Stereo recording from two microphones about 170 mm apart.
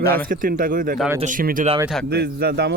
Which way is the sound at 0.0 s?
15° left (ahead or behind).